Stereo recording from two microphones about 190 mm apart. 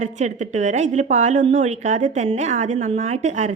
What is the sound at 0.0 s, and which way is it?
A woman's voice, 35° right (ahead or behind).